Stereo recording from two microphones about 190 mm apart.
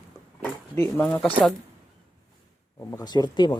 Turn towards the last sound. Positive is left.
turn(degrees=25)  # may be behind; listen again after turning